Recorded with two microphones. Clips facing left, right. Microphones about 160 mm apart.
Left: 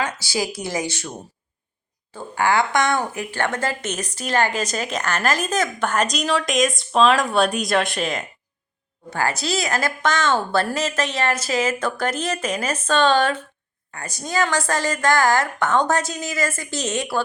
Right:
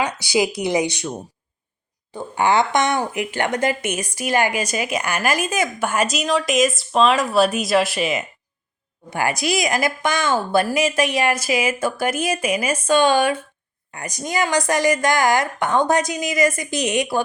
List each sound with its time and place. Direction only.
0.0 s speech: 15° right (ahead or behind)
2.1 s speech: 20° right (ahead or behind)